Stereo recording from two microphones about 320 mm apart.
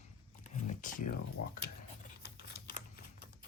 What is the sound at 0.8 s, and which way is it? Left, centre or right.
Speech, left.